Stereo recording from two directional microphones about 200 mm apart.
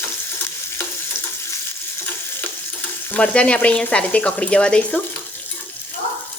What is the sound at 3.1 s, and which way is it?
A woman's voice, 5° left (ahead or behind).